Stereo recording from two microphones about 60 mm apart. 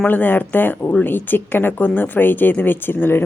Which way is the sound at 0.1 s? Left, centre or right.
Left.